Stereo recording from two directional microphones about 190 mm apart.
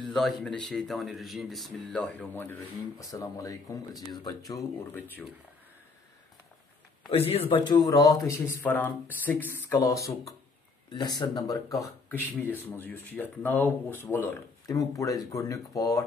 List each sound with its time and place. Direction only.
0.0 s speech: centre (ahead or behind); by 4.4 s 20° left (ahead or behind)
4.5 s speech: 10° left (ahead or behind)
7.1 s speech: 30° left (ahead or behind)
11.7 s speech: 5° left (ahead or behind)